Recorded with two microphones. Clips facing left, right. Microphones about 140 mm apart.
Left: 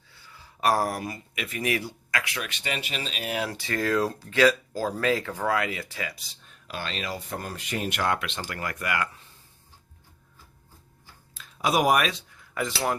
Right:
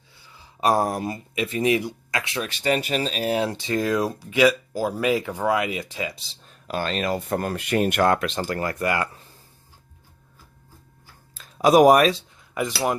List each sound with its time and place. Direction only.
0.1 s speech: 15° right (ahead or behind)
6.5 s speech: 45° right (ahead or behind)
11.3 s speech: 40° right (ahead or behind)
12.3 s cutlery: 20° right (ahead or behind)